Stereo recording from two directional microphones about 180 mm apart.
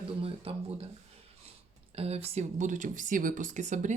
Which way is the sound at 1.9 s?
35° right (ahead or behind).